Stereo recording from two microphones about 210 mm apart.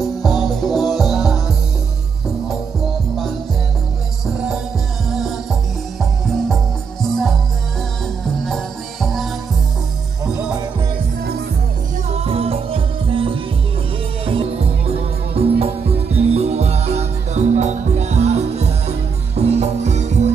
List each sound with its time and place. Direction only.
0.0 s music: centre (ahead or behind)
5.1 s music: centre (ahead or behind)
8.4 s music: centre (ahead or behind)
12.1 s music: 30° right (ahead or behind)